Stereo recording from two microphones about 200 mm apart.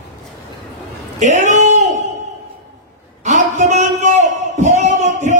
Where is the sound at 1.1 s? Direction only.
35° right (ahead or behind).